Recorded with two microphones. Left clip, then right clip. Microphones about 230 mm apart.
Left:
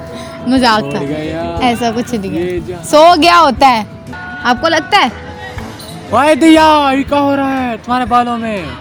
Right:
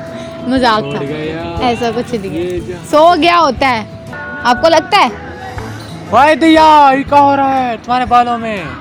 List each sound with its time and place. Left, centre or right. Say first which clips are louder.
0.4 s speech: left 1 dB; left
1.1 s a man's voice: left 1 dB; left
1.6 s speech: even; left
4.4 s a man's voice: right 3 dB; left